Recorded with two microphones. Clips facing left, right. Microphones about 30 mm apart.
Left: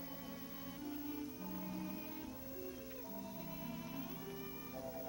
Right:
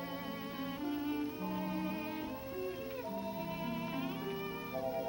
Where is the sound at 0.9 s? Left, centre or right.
Right.